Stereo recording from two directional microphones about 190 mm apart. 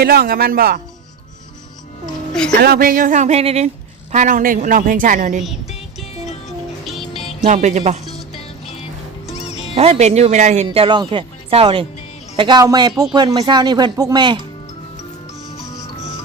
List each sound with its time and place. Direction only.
0.0 s a woman's voice: 55° right (ahead or behind)
2.6 s a woman's voice: 55° right (ahead or behind)
7.1 s music: 35° left (ahead or behind)
7.4 s speech: 40° right (ahead or behind)
9.2 s music: 35° left (ahead or behind)
9.7 s speech: 30° right (ahead or behind)